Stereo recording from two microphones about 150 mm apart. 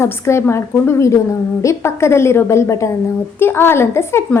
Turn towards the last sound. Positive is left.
turn(degrees=15)  # may be behind; listen again after turning